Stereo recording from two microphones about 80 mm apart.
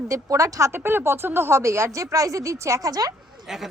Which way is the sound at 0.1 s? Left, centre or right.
Right.